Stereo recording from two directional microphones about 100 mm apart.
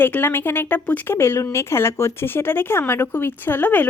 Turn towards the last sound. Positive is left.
turn(degrees=15)  # may be behind; listen again after turning